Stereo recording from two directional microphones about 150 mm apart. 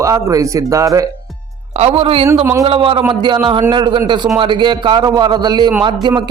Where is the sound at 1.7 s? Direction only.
45° right (ahead or behind).